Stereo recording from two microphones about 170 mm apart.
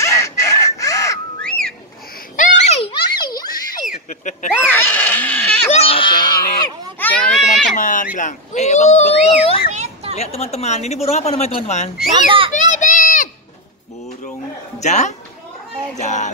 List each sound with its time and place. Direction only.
0.0 s crow: 15° left (ahead or behind)
1.4 s whistling: 5° left (ahead or behind)
2.3 s children playing: 45° left (ahead or behind); by 3.3 s 30° left (ahead or behind)
4.1 s a sound: 45° left (ahead or behind)
4.6 s screaming: 10° left (ahead or behind)
5.7 s a sound: 35° left (ahead or behind)
7.0 s children playing: 10° left (ahead or behind)
7.7 s a sound: 50° left (ahead or behind)
9.7 s children playing: 40° right (ahead or behind)
10.1 s speech: 40° left (ahead or behind)
12.5 s a sound: 45° left (ahead or behind)
14.8 s a man's voice: 45° left (ahead or behind)